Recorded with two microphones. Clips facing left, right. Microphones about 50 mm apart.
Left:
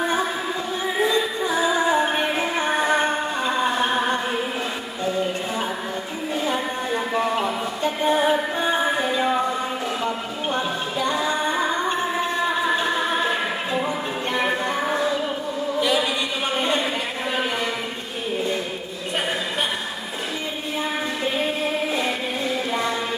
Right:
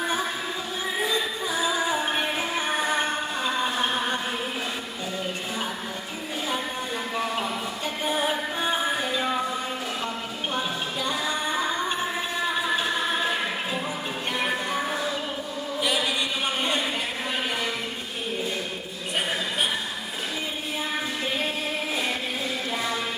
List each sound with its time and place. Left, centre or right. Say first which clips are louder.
0.0 s music: left 4 dB; centre
6.4 s music: left 3 dB; centre
11.5 s music: left 4 dB; centre
15.8 s chant: left 4 dB; centre
16.6 s a sound: left 6 dB; centre
21.2 s music: left 7 dB; centre